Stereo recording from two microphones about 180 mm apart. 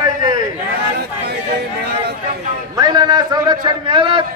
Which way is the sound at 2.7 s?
20° right (ahead or behind).